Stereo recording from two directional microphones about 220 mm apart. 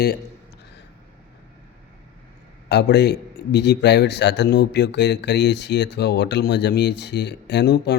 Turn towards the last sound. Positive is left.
turn(degrees=50)  # may be behind; listen again after turning